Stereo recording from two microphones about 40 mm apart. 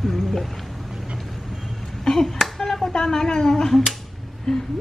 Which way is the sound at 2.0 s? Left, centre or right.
Centre.